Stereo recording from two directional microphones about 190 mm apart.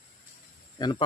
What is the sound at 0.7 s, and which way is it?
Speech, 20° left (ahead or behind).